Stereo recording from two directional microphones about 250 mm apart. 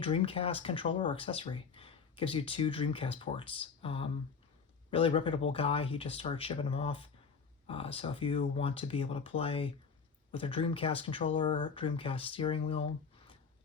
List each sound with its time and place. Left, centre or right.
0.0 s speech: left